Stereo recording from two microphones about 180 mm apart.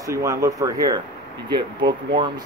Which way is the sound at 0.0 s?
15° right (ahead or behind).